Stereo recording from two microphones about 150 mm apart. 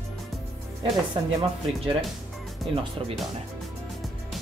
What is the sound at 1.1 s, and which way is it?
Speech, 40° right (ahead or behind).